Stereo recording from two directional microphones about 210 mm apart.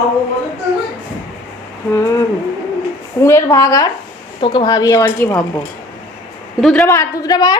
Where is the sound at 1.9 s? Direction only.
15° left (ahead or behind).